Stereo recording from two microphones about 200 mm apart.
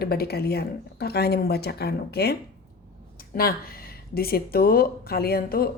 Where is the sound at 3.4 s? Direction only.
50° left (ahead or behind).